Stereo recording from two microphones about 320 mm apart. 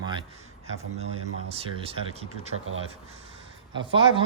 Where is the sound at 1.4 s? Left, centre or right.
Centre.